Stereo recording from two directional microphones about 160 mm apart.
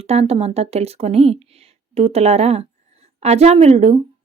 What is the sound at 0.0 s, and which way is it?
Speech, 40° right (ahead or behind).